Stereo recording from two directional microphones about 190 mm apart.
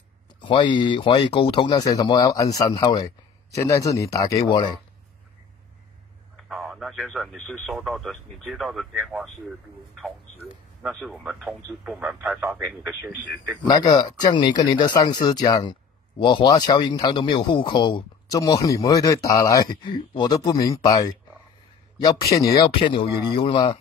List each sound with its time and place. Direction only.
0.4 s a man's voice: 25° left (ahead or behind)
6.5 s speech: centre (ahead or behind)
13.7 s a man's voice: 20° left (ahead or behind)